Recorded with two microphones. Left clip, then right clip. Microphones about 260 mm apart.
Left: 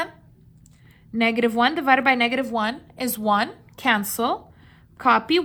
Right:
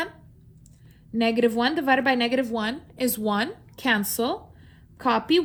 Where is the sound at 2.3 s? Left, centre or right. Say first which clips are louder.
Left 2 dB; left.